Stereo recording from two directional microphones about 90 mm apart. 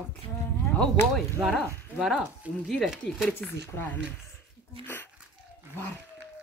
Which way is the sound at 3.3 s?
20° left (ahead or behind).